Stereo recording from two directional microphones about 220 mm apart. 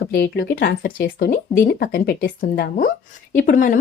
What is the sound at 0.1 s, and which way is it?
Speech, 45° left (ahead or behind).